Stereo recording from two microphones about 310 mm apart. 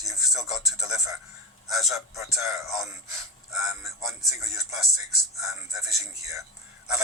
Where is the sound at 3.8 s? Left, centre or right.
Centre.